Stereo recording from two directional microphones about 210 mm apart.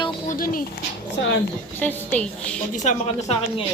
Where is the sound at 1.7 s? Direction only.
10° left (ahead or behind).